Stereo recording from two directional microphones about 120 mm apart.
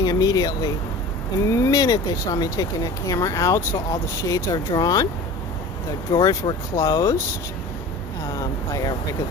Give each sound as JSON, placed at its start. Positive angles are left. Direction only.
{"t": 0.0, "sound": "speech", "side_deg": 30}
{"t": 6.1, "sound": "speech", "side_deg": 35}
{"t": 6.7, "sound": "speech", "side_deg": 25}
{"t": 8.4, "sound": "speech", "side_deg": 30}